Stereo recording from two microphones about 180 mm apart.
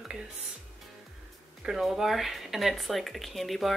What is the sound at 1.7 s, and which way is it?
Speech, centre (ahead or behind).